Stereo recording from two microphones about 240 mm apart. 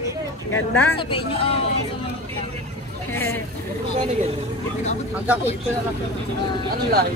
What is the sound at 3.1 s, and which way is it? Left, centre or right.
Speech, centre.